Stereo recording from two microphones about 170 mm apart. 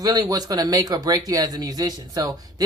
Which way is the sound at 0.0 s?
20° right (ahead or behind).